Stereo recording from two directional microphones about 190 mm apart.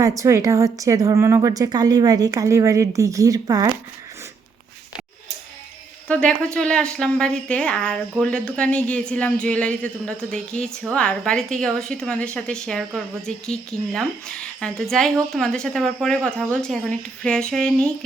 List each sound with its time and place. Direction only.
0.0 s a woman's voice: 15° right (ahead or behind)
6.1 s a woman's voice: 5° left (ahead or behind)